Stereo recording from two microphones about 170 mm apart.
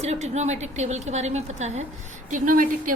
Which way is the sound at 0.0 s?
40° right (ahead or behind).